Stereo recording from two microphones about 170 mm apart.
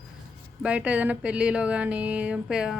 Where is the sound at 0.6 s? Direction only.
10° right (ahead or behind).